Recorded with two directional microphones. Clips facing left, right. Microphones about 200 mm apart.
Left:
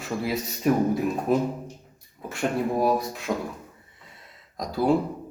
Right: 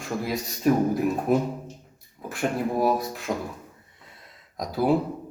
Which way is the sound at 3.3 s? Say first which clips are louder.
Left 1 dB; 20° right (ahead or behind).